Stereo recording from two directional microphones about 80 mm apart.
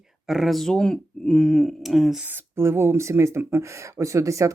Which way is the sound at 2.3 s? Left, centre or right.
Right.